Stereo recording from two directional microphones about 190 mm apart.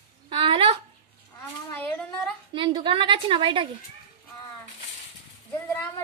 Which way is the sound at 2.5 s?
25° right (ahead or behind).